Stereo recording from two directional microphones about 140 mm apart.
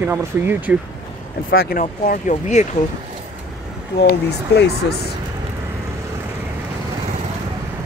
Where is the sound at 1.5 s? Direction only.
90° left; by 2.7 s 60° left (ahead or behind).